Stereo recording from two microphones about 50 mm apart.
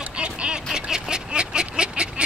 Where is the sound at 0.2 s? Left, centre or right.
Right.